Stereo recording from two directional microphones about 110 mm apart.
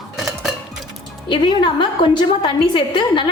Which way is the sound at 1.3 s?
50° left (ahead or behind).